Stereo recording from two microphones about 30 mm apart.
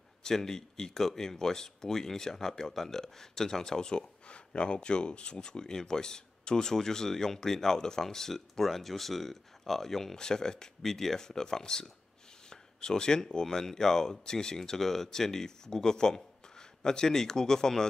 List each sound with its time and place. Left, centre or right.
0.2 s speech: centre
4.3 s speech: left; by 10.1 s centre
10.1 s speech: left
10.8 s speech: centre